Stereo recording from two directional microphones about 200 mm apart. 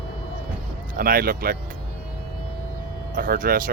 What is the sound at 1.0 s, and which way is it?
Speech, 50° right (ahead or behind).